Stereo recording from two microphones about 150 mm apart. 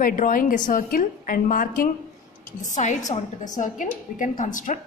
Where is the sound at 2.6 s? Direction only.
55° left (ahead or behind).